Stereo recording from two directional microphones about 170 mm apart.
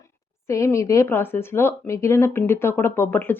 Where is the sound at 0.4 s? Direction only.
15° left (ahead or behind).